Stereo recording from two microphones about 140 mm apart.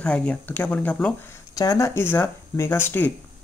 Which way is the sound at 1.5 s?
25° left (ahead or behind).